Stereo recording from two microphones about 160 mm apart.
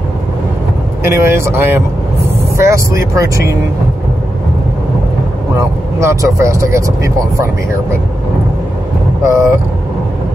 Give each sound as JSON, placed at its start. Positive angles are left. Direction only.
{"t": 1.0, "sound": "speech", "side_deg": -15}
{"t": 5.6, "sound": "speech", "side_deg": -20}
{"t": 9.2, "sound": "speech", "side_deg": -20}